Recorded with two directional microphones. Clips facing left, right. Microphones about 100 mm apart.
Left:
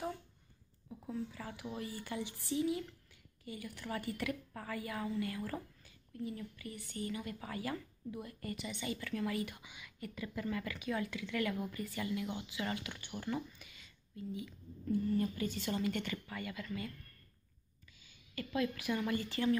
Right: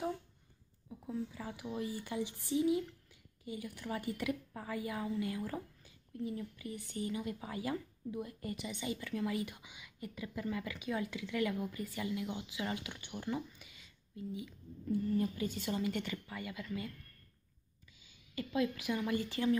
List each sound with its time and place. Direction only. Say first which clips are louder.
0.8 s a woman's voice: right 1 dB; 10° right (ahead or behind)
18.0 s speech: right 2 dB; 15° right (ahead or behind)